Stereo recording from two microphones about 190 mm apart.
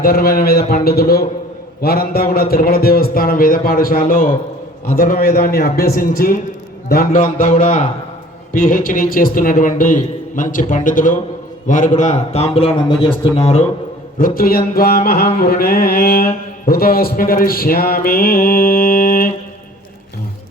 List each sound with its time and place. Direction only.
0.0 s mantra: 50° left (ahead or behind)
11.9 s speech: 35° left (ahead or behind)
14.2 s mantra: 50° left (ahead or behind)